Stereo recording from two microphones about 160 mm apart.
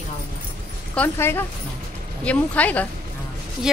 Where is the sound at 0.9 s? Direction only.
10° left (ahead or behind).